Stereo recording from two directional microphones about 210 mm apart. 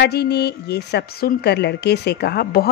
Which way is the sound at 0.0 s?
50° left (ahead or behind).